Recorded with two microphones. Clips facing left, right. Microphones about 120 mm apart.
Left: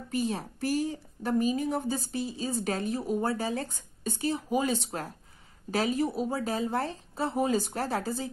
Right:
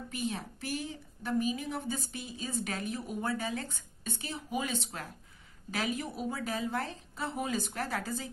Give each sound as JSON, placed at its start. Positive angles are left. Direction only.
{"t": 0.1, "sound": "a woman's voice", "side_deg": 35}